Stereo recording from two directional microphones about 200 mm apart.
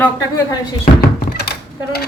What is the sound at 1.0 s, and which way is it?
Thunk, 50° left (ahead or behind).